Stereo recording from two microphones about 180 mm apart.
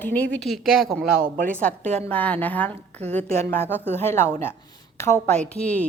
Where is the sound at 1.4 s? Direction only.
10° left (ahead or behind).